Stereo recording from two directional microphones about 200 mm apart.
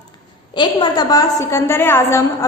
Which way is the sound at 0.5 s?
20° left (ahead or behind).